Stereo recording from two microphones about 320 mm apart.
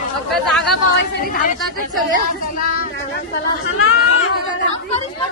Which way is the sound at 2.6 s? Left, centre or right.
Left.